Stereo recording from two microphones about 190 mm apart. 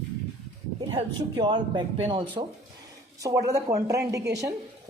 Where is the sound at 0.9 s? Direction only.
25° right (ahead or behind).